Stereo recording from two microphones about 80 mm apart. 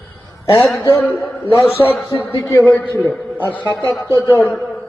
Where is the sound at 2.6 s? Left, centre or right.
Centre.